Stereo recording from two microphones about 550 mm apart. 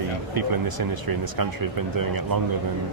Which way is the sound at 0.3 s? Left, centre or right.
Right.